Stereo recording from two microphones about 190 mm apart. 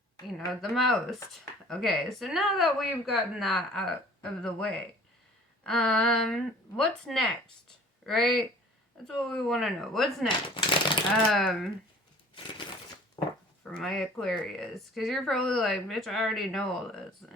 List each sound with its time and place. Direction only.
0.3 s speech: centre (ahead or behind)
12.3 s crushing: 25° left (ahead or behind)
13.2 s a sound: 25° left (ahead or behind)
13.7 s speech: 5° left (ahead or behind)